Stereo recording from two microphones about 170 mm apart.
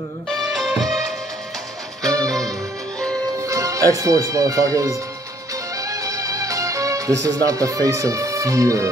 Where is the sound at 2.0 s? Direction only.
20° right (ahead or behind).